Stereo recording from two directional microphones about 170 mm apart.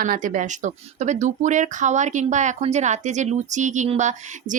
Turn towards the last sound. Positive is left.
turn(degrees=-45)  # may be behind; listen again after turning